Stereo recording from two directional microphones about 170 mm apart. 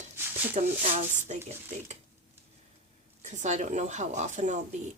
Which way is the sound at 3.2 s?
45° right (ahead or behind).